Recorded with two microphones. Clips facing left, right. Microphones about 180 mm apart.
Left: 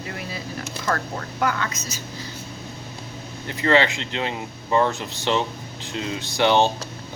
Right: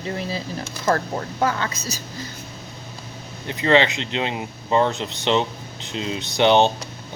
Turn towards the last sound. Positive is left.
turn(degrees=-20)  # may be behind; listen again after turning